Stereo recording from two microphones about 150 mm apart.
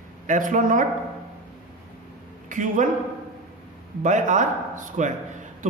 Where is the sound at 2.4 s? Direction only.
55° right (ahead or behind).